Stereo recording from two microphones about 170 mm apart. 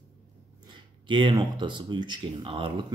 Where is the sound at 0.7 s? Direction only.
30° right (ahead or behind).